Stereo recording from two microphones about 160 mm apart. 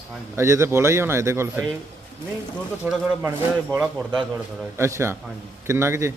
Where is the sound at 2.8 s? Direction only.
5° right (ahead or behind).